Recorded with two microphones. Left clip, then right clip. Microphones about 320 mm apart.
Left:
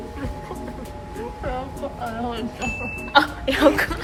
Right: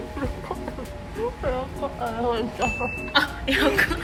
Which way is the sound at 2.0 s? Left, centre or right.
Centre.